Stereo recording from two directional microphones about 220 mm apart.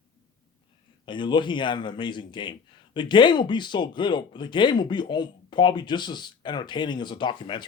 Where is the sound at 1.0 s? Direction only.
20° left (ahead or behind).